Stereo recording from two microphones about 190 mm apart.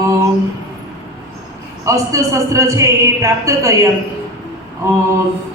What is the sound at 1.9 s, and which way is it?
A woman's voice, 15° right (ahead or behind).